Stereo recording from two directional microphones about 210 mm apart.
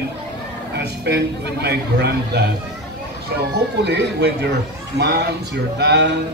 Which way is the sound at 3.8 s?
55° right (ahead or behind).